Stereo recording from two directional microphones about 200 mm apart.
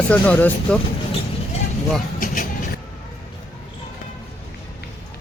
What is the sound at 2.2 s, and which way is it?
Vehicle, 40° left (ahead or behind).